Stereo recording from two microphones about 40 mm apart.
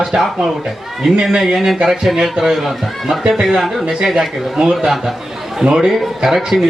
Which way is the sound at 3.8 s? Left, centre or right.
Centre.